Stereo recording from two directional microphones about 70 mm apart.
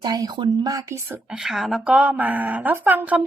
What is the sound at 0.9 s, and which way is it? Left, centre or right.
Speech, right.